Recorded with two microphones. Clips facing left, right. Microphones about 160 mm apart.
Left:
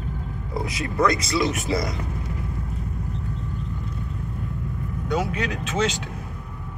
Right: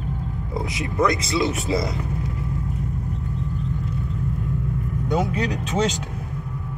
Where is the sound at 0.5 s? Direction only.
20° right (ahead or behind).